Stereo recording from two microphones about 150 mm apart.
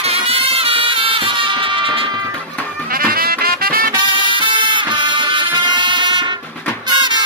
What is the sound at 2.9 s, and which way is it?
Music, 75° right (ahead or behind).